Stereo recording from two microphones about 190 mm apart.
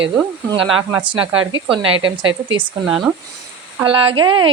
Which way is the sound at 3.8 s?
25° right (ahead or behind).